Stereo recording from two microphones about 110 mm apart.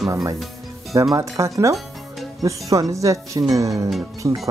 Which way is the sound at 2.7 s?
30° right (ahead or behind).